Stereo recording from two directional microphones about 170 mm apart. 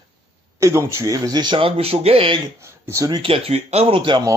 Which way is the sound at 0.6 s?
15° right (ahead or behind).